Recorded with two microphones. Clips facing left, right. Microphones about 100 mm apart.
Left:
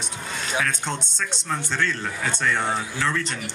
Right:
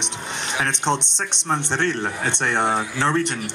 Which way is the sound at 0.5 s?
25° right (ahead or behind).